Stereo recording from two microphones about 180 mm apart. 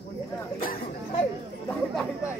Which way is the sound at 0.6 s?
55° left (ahead or behind).